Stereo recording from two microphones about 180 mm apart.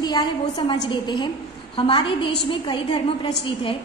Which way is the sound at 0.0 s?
25° left (ahead or behind).